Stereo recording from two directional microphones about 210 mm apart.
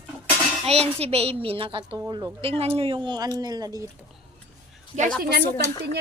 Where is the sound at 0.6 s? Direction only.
30° right (ahead or behind).